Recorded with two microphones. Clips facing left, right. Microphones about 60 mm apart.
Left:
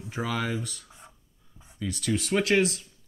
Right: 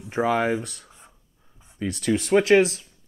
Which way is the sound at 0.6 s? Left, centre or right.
Right.